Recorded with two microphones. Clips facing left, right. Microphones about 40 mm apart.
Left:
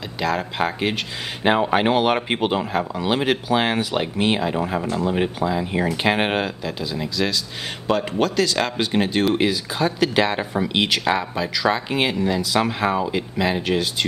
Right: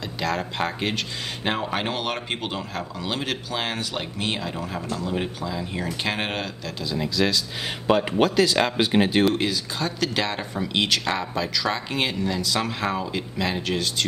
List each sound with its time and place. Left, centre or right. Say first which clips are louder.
0.2 s speech: left 4 dB; centre
7.8 s speech: right 1 dB; centre
9.3 s speech: left 4 dB; centre